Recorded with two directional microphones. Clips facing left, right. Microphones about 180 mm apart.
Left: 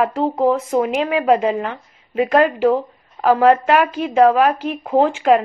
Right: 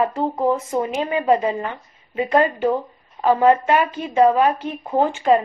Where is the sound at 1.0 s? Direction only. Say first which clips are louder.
Even; 90° left.